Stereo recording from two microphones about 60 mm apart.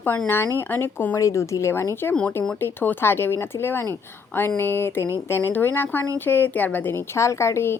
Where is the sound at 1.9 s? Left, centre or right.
Left.